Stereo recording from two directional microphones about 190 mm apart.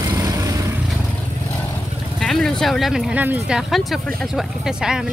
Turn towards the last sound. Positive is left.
turn(degrees=-5)  # may be behind; listen again after turning